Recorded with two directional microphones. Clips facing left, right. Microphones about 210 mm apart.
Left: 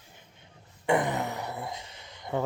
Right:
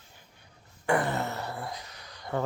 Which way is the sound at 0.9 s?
15° left (ahead or behind).